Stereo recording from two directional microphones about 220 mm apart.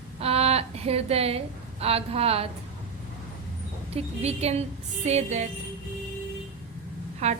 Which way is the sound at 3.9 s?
30° right (ahead or behind).